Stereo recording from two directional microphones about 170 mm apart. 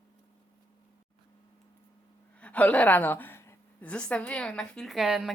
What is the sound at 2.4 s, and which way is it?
A woman's voice, 10° left (ahead or behind).